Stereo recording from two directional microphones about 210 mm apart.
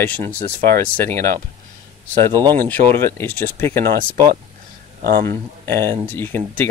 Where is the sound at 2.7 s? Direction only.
10° left (ahead or behind).